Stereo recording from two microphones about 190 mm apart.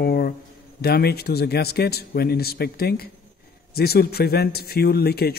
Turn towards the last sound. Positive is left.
turn(degrees=55)  # may be behind; listen again after turning